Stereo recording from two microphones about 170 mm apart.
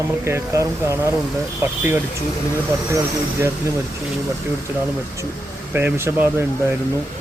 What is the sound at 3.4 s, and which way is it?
Speech, 15° right (ahead or behind).